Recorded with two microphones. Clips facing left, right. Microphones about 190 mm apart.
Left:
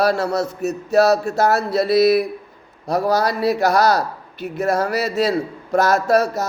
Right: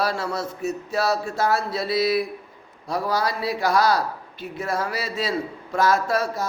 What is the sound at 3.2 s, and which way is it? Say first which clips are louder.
Speech: left 6 dB; 70° left (ahead or behind).